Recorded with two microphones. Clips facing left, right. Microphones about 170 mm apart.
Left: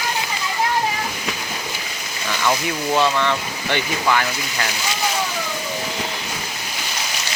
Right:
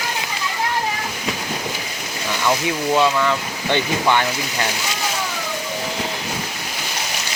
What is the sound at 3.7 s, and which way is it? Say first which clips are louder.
Speech: right 2 dB; 25° right (ahead or behind).